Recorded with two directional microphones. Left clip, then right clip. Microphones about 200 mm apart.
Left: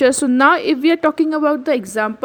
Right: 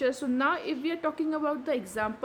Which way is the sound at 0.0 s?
50° left (ahead or behind).